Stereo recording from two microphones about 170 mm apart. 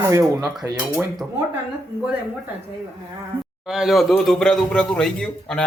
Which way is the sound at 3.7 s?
Centre (ahead or behind).